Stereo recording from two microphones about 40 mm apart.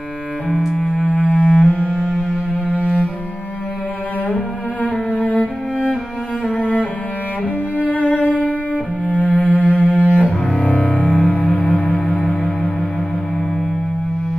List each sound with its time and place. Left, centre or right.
0.7 s cello: centre
1.0 s cello: left
2.0 s music: centre
4.8 s cello: left
6.6 s music: left
9.1 s cello: left
10.6 s music: left